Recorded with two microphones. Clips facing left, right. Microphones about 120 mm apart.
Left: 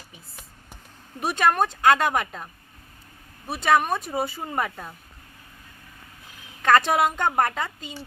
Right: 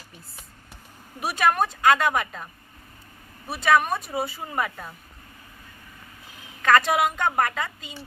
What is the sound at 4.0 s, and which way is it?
Speech, centre (ahead or behind).